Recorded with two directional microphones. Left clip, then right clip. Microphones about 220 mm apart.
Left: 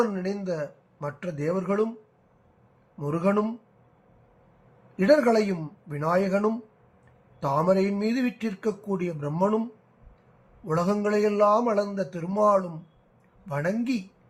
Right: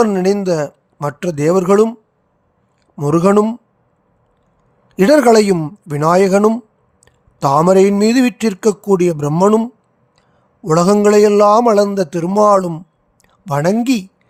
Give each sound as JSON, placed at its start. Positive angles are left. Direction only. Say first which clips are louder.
{"t": 0.0, "sound": "a man's voice", "louder": "right 14 dB", "side_deg": -55}
{"t": 3.0, "sound": "a man's voice", "louder": "right 13 dB", "side_deg": -55}
{"t": 4.9, "sound": "a man's voice", "louder": "right 11 dB", "side_deg": -55}
{"t": 10.7, "sound": "a man's voice", "louder": "right 14 dB", "side_deg": -55}